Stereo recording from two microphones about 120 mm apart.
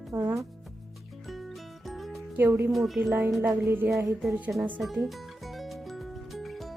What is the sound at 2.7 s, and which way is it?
Speech, centre (ahead or behind).